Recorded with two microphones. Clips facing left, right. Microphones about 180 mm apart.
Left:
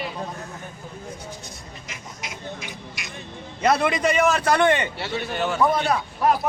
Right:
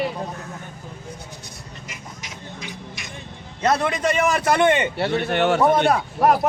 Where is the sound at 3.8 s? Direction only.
5° left (ahead or behind).